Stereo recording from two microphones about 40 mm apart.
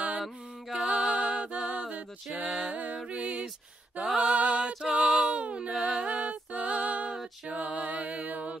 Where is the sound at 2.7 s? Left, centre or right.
Right.